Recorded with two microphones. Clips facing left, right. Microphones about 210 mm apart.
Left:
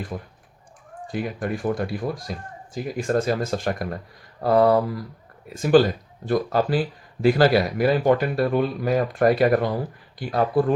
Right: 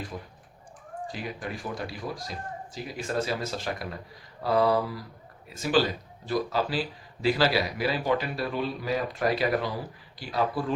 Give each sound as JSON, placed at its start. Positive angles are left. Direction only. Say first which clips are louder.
{"t": 0.1, "sound": "speech", "louder": "left 6 dB", "side_deg": 50}